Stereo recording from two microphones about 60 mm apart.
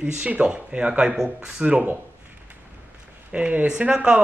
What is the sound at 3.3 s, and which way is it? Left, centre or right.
Speech, right.